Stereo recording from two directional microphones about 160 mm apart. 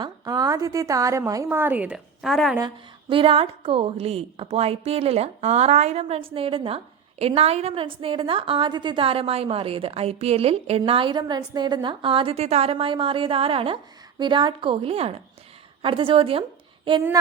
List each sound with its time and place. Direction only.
0.0 s a woman's voice: 25° right (ahead or behind); by 2.6 s centre (ahead or behind)
2.6 s a woman's voice: 30° right (ahead or behind)